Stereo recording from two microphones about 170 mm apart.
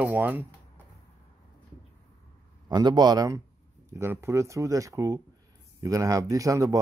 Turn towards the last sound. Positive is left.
turn(degrees=-20)  # may be behind; listen again after turning